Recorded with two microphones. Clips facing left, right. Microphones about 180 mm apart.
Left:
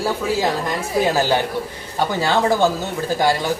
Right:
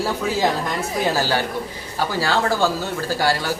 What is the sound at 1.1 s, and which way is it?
Speech, 20° left (ahead or behind).